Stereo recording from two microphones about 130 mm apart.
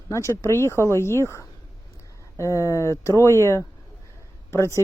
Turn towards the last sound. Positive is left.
turn(degrees=20)  # may be behind; listen again after turning